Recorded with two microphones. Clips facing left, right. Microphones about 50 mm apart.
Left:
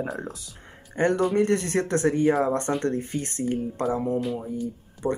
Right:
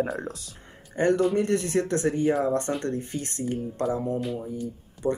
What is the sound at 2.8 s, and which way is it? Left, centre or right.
Speech, left.